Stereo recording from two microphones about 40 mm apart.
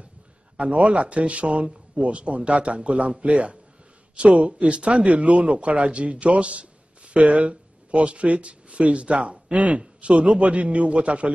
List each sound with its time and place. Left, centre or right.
0.6 s speech: right